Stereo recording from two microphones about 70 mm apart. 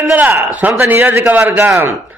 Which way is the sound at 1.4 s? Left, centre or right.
Right.